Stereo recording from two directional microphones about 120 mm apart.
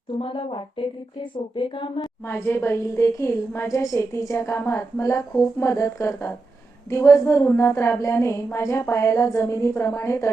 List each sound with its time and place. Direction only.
0.2 s speech: 50° left (ahead or behind)
2.0 s a woman's voice: 20° left (ahead or behind)